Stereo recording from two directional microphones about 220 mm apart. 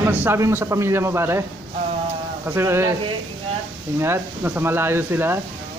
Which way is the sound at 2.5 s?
10° right (ahead or behind).